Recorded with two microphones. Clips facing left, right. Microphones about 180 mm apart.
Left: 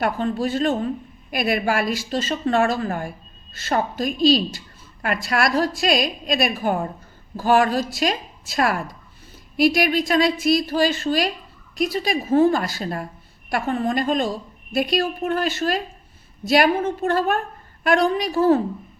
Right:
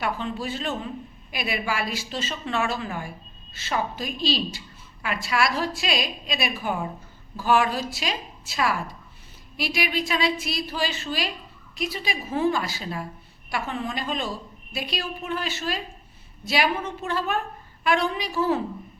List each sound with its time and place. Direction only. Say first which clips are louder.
0.0 s a woman's voice: left 6 dB; 45° left (ahead or behind)